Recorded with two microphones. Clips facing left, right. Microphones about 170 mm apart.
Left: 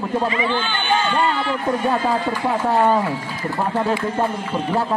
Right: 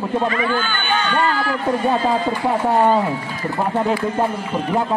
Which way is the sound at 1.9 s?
20° right (ahead or behind).